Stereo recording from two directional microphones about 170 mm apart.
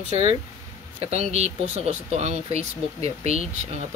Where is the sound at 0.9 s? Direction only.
40° right (ahead or behind).